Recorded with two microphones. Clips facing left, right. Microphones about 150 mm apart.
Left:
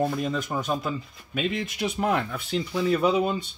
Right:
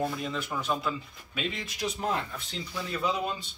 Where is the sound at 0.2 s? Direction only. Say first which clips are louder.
Left 5 dB; 45° left (ahead or behind); by 3.2 s 65° left (ahead or behind).